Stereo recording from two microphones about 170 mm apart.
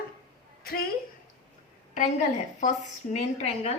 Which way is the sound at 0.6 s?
60° left (ahead or behind).